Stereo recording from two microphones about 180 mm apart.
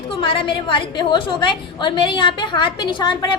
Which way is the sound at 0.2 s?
30° left (ahead or behind).